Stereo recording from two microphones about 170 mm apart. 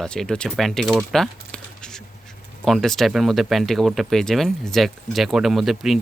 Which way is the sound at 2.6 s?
Centre (ahead or behind).